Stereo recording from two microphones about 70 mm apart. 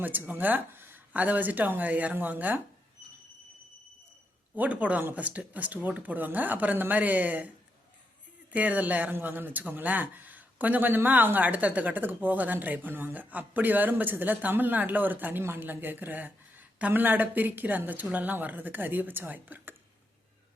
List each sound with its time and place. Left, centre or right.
0.0 s speech: right
4.5 s speech: right
8.5 s speech: right